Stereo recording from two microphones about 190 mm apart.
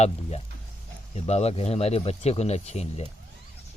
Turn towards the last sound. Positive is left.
turn(degrees=35)  # may be behind; listen again after turning